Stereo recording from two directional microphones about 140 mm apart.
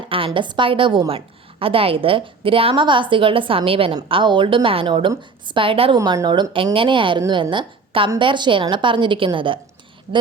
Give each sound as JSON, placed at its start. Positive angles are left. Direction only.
{"t": 0.3, "sound": "a woman's voice", "side_deg": -35}
{"t": 6.0, "sound": "a woman's voice", "side_deg": -25}